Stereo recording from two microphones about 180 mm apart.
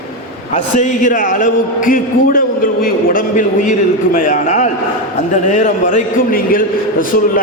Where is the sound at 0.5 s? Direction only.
45° left (ahead or behind).